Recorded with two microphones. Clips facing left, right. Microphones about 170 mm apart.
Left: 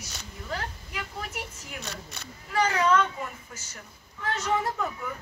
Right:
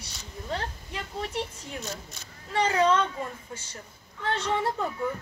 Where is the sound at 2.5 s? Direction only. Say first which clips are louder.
Even; 30° right (ahead or behind).